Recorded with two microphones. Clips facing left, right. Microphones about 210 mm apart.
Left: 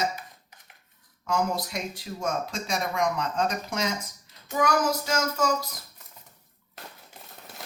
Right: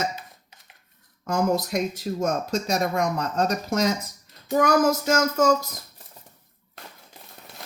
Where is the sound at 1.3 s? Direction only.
45° right (ahead or behind).